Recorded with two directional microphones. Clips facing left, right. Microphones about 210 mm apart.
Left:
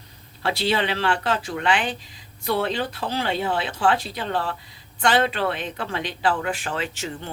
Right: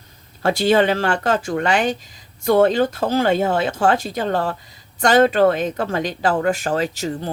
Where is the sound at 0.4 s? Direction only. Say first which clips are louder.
Right 8 dB; 45° right (ahead or behind).